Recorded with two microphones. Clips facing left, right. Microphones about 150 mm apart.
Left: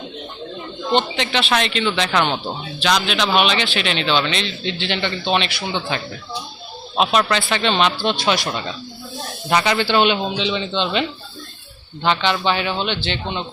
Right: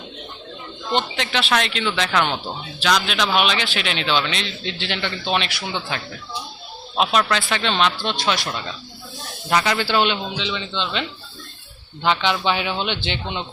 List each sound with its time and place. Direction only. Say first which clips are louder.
0.9 s a man's voice: left 3 dB; centre (ahead or behind)
10.2 s a man's voice: left 5 dB; 20° left (ahead or behind)
12.0 s speech: left 1 dB; 5° right (ahead or behind)